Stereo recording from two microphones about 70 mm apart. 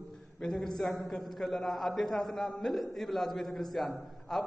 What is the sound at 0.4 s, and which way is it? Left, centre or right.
A man's voice, centre.